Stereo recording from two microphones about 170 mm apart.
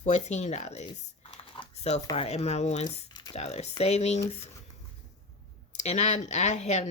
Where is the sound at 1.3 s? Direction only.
30° left (ahead or behind).